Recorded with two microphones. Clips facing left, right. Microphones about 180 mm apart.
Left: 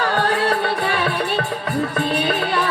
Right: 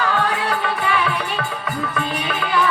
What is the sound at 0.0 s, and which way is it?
Music, 35° left (ahead or behind).